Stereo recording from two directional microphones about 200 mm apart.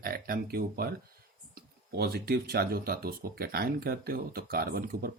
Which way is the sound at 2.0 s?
50° right (ahead or behind).